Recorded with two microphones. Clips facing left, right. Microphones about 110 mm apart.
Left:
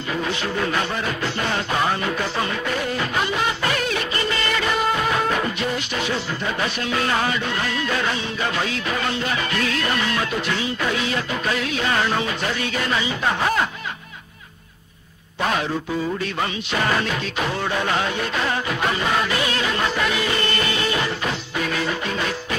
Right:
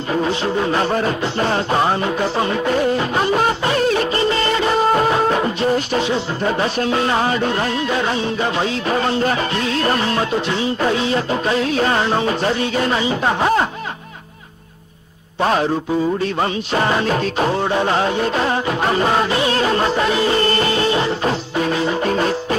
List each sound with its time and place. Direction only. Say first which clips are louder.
0.1 s music: right 6 dB; 30° right (ahead or behind)
5.9 s music: right 6 dB; 25° right (ahead or behind)
6.4 s music: right 7 dB; 35° right (ahead or behind)
7.8 s music: right 5 dB; 25° right (ahead or behind)
15.4 s music: right 6 dB; 35° right (ahead or behind)